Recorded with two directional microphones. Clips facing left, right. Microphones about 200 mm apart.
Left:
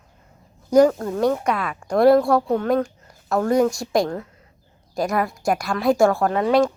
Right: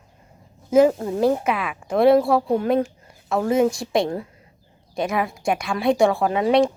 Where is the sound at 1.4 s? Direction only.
5° right (ahead or behind).